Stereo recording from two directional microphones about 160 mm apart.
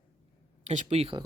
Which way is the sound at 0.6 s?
45° right (ahead or behind).